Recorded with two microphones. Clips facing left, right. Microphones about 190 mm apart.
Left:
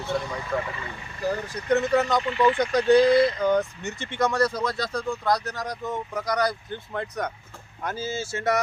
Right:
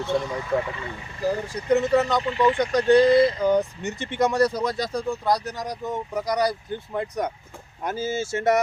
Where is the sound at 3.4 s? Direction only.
15° right (ahead or behind).